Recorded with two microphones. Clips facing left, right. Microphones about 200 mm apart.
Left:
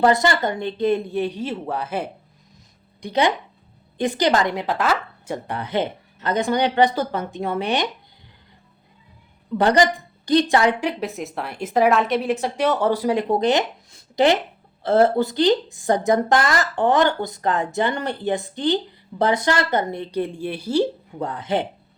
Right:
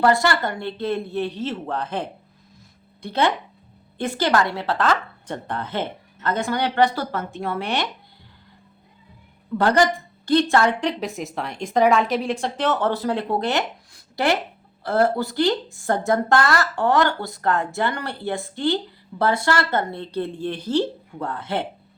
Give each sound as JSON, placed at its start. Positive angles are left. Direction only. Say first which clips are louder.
{"t": 0.0, "sound": "a woman's voice", "louder": "left 1 dB", "side_deg": 20}
{"t": 9.6, "sound": "a woman's voice", "louder": "left 1 dB", "side_deg": 15}